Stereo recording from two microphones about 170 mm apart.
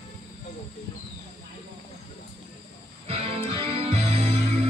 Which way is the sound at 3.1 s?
35° right (ahead or behind).